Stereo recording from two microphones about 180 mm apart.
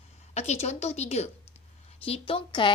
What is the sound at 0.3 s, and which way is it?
A woman's voice, 35° left (ahead or behind).